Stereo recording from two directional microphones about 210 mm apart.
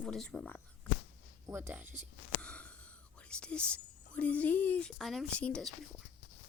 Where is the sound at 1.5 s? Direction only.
10° right (ahead or behind).